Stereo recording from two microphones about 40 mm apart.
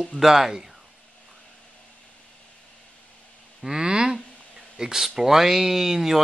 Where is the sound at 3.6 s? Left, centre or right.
Centre.